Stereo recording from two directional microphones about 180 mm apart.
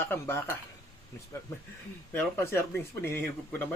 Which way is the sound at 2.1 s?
10° left (ahead or behind).